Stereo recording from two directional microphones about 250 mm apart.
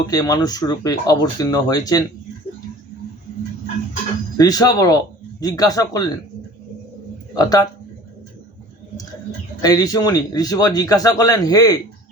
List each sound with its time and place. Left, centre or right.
0.1 s a man's voice: centre
4.4 s a man's voice: centre
7.3 s a man's voice: centre
9.6 s a man's voice: centre